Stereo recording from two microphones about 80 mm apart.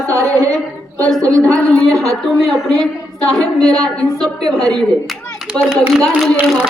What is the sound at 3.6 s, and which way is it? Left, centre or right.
Speech, right.